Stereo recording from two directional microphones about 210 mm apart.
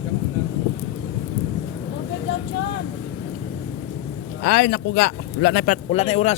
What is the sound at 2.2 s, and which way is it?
Vehicle, 60° left (ahead or behind).